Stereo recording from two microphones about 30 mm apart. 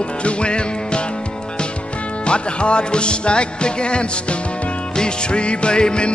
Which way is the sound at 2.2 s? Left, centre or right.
Left.